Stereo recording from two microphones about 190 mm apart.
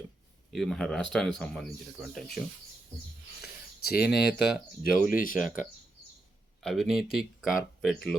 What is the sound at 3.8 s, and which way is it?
Speech, 55° left (ahead or behind).